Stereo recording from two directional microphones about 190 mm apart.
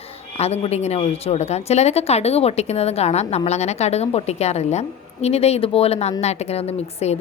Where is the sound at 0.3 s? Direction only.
35° left (ahead or behind).